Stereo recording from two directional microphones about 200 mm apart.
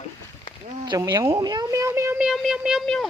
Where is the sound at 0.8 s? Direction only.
20° right (ahead or behind); by 3.1 s centre (ahead or behind).